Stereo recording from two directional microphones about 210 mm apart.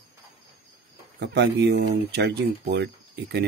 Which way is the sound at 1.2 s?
55° right (ahead or behind).